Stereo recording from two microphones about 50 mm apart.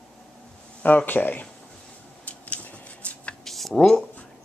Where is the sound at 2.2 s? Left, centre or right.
Left.